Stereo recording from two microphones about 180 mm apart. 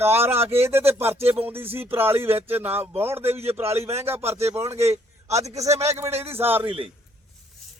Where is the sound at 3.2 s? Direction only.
35° right (ahead or behind).